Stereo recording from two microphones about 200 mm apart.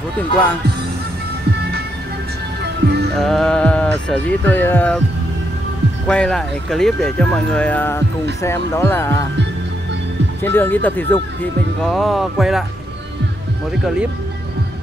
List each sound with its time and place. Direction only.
2.6 s music: 55° right (ahead or behind)
3.2 s speech: centre (ahead or behind)
6.0 s speech: 5° left (ahead or behind)
10.4 s speech: 10° left (ahead or behind)